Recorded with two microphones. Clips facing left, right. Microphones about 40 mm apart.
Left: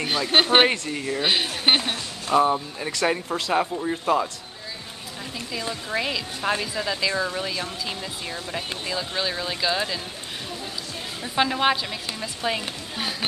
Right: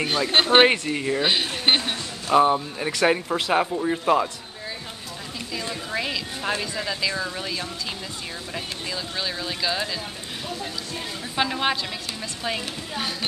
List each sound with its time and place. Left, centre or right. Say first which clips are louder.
0.3 s speech: right 1 dB; centre
0.7 s speech: right 3 dB; centre
1.2 s speech: left 2 dB; centre
2.3 s speech: right 2 dB; centre
5.5 s speech: left 1 dB; centre
11.3 s speech: left 3 dB; centre